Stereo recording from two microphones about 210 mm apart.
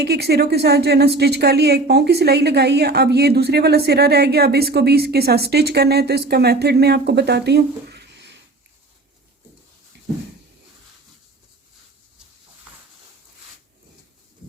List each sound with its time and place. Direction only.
0.0 s speech: 50° right (ahead or behind)